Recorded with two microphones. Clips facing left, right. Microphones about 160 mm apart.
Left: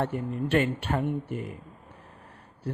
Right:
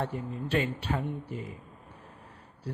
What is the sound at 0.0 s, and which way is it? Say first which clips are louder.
Speech: left 5 dB; 60° left (ahead or behind).